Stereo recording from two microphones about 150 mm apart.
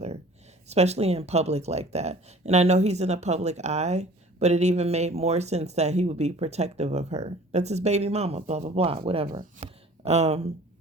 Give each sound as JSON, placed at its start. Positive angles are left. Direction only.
{"t": 0.7, "sound": "speech", "side_deg": -45}